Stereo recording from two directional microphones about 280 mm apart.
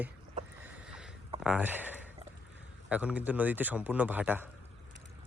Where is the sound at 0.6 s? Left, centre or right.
Centre.